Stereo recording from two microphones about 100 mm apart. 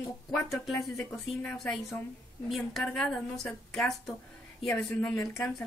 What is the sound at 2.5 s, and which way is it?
Speech, 5° left (ahead or behind).